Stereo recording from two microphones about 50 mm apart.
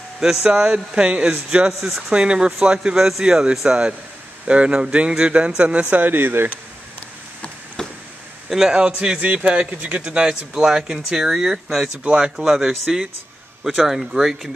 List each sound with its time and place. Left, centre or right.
0.2 s a man's voice: centre
1.7 s speech: centre
2.1 s a man's voice: centre; by 6.5 s right
8.5 s a man's voice: centre
8.7 s a man's voice: right
10.5 s a man's voice: centre
12.0 s a man's voice: right
12.4 s a man's voice: centre